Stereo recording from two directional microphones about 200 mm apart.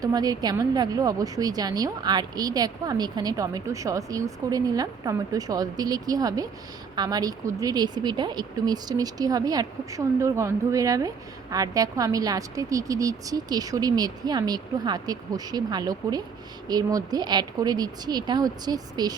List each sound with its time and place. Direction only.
0.0 s a woman's voice: 20° right (ahead or behind)